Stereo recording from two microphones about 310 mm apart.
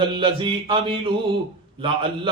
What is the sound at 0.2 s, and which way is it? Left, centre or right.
A man's voice, centre.